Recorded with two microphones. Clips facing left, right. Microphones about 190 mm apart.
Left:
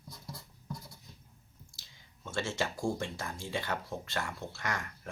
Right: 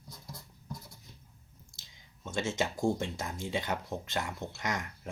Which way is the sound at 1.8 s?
20° right (ahead or behind).